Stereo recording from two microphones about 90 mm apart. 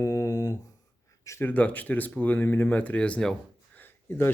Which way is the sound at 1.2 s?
35° left (ahead or behind).